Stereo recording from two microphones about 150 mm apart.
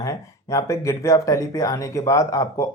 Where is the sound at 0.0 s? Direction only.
20° left (ahead or behind).